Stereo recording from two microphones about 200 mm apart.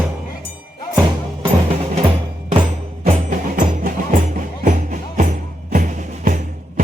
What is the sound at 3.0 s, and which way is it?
Music, 45° right (ahead or behind).